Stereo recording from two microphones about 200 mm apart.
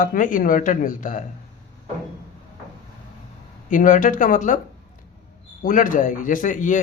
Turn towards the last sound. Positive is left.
turn(degrees=40)  # may be behind; listen again after turning